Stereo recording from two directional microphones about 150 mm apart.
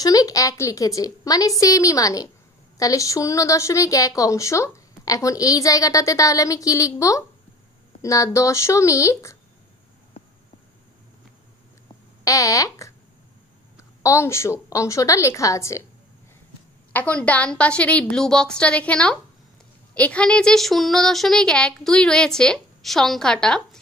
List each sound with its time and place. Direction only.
0.0 s a woman's voice: 25° left (ahead or behind)
12.3 s a woman's voice: 20° left (ahead or behind)
16.9 s a woman's voice: 10° left (ahead or behind)